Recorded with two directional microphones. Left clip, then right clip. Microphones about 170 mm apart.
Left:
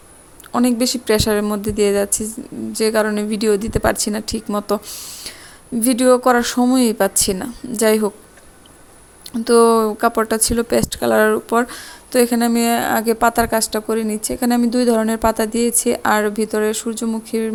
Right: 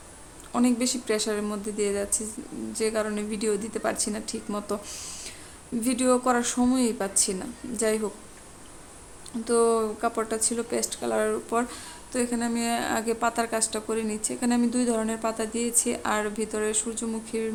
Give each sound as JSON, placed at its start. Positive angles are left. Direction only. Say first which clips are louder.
{"t": 0.5, "sound": "speech", "louder": "left 8 dB", "side_deg": 45}
{"t": 4.9, "sound": "speech", "louder": "left 6 dB", "side_deg": 30}
{"t": 5.8, "sound": "speech", "louder": "left 10 dB", "side_deg": 45}
{"t": 9.4, "sound": "speech", "louder": "left 10 dB", "side_deg": 45}